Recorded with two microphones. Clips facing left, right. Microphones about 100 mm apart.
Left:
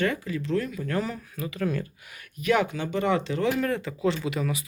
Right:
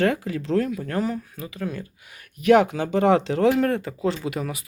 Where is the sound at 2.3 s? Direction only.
75° right (ahead or behind); by 3.9 s 55° right (ahead or behind).